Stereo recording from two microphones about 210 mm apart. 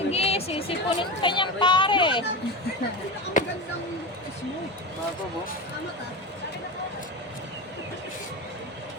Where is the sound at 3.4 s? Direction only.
35° left (ahead or behind).